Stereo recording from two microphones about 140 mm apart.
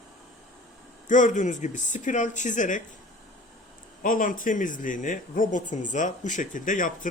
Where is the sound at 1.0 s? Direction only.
65° left (ahead or behind).